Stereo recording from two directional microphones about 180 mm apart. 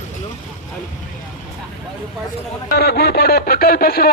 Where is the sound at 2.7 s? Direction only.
60° left (ahead or behind).